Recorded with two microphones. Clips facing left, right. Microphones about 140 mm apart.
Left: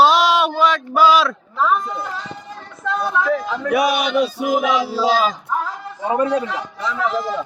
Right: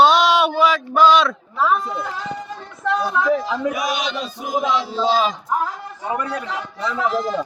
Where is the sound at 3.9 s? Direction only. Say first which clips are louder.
Left 4 dB; 10° left (ahead or behind).